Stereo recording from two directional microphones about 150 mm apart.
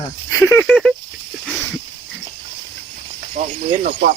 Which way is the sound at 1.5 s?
5° right (ahead or behind).